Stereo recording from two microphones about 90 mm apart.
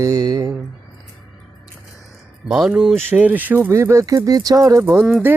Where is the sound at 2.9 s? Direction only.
20° right (ahead or behind); by 4.8 s 40° right (ahead or behind).